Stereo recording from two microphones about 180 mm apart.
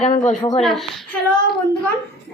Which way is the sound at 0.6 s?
Centre (ahead or behind).